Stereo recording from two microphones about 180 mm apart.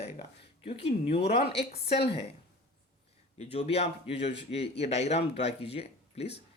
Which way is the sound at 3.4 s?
35° left (ahead or behind).